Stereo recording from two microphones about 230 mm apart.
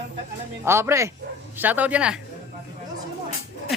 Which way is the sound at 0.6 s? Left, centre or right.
Centre.